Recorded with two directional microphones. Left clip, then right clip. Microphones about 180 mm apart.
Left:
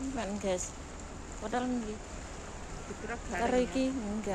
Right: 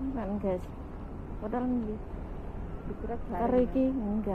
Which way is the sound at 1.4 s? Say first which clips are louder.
Even; 20° left (ahead or behind).